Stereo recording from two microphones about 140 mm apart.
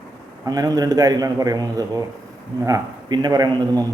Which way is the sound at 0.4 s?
25° right (ahead or behind).